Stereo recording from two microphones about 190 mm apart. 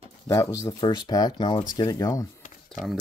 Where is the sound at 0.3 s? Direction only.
15° left (ahead or behind).